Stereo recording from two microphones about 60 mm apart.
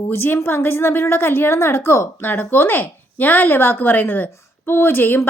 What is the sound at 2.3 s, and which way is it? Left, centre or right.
Speech, left.